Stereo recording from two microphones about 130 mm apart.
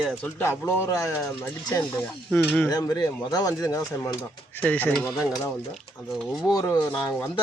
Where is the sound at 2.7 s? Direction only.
30° left (ahead or behind); by 6.5 s centre (ahead or behind).